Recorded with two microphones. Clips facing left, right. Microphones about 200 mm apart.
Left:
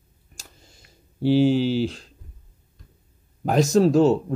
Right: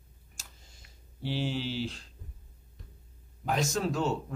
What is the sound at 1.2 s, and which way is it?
Speech, 40° left (ahead or behind).